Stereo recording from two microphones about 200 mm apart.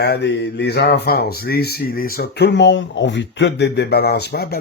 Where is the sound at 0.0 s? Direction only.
55° left (ahead or behind).